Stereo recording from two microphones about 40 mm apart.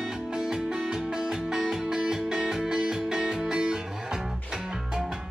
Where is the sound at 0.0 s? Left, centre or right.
Centre.